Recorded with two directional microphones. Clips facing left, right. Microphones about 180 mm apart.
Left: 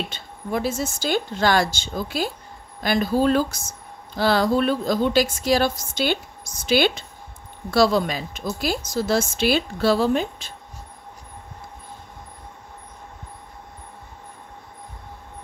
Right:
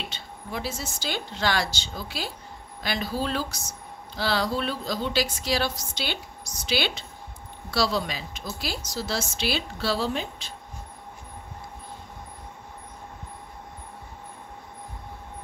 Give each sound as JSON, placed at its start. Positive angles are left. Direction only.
{"t": 0.1, "sound": "speech", "side_deg": 50}